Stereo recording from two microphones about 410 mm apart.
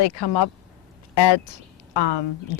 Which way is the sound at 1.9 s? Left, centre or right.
Left.